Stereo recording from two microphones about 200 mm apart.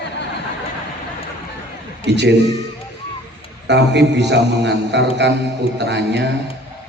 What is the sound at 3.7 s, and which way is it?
A man's voice, 60° right (ahead or behind).